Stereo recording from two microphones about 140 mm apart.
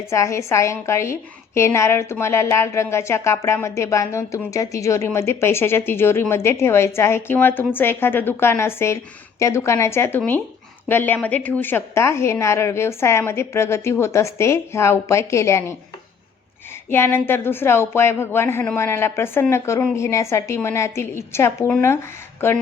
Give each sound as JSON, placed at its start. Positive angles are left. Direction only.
{"t": 0.1, "sound": "a woman's voice", "side_deg": 20}
{"t": 16.9, "sound": "a woman's voice", "side_deg": 15}